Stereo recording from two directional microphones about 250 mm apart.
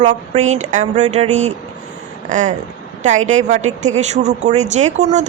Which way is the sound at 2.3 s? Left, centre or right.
Right.